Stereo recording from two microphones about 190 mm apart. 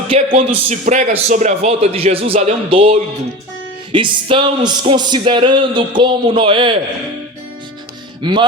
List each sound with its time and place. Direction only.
0.1 s a man's voice: 30° right (ahead or behind)
8.2 s speech: 25° right (ahead or behind)